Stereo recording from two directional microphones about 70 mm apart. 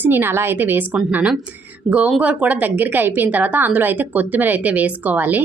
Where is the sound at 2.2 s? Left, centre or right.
Centre.